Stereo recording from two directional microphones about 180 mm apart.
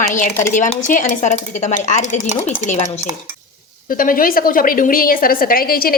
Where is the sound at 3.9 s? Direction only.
50° left (ahead or behind).